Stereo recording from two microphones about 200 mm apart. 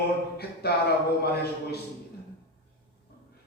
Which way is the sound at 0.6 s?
50° left (ahead or behind).